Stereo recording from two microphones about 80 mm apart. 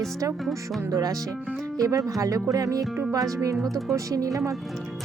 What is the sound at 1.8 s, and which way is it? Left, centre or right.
Speech, right.